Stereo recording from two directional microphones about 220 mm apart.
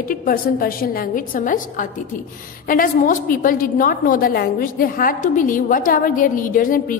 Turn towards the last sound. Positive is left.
turn(degrees=40)  # may be behind; listen again after turning